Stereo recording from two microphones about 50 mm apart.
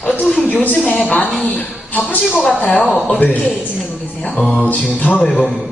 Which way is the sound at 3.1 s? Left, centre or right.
Left.